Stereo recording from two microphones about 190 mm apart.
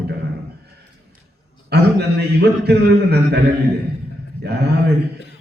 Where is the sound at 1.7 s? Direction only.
60° right (ahead or behind).